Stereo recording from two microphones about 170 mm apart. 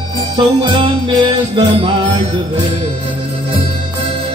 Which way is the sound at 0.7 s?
30° right (ahead or behind).